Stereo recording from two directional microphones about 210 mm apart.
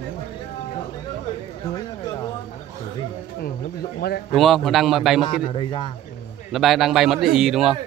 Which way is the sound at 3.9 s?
45° left (ahead or behind).